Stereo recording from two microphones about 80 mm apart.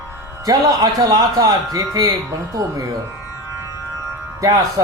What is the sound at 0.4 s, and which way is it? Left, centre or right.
Speech, right.